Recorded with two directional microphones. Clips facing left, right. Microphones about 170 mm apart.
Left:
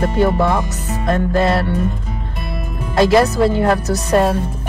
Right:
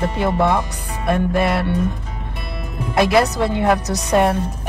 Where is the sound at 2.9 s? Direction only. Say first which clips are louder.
Left 3 dB; 15° right (ahead or behind).